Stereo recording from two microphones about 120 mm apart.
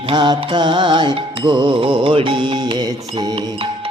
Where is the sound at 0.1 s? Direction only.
40° right (ahead or behind).